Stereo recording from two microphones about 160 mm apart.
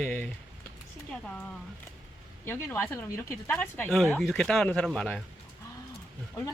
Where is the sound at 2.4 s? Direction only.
15° left (ahead or behind).